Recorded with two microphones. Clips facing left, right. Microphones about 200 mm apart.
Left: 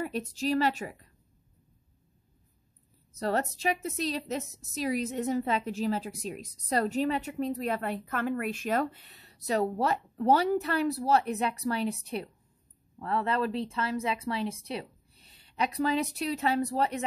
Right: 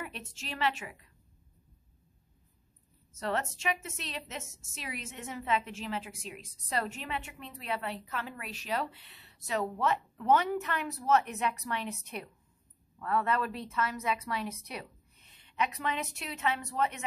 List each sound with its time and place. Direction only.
0.0 s a woman's voice: 40° left (ahead or behind)
3.1 s a woman's voice: 35° left (ahead or behind)